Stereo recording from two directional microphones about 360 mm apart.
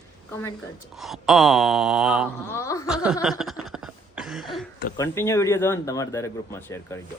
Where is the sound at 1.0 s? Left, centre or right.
Centre.